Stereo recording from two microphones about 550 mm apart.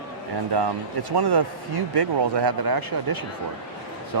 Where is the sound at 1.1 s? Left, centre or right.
Right.